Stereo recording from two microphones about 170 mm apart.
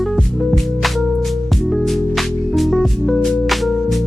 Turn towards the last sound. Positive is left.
turn(degrees=0)  # may be behind; listen again after turning